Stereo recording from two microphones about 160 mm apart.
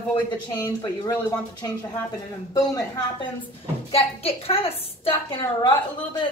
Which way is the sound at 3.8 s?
35° left (ahead or behind).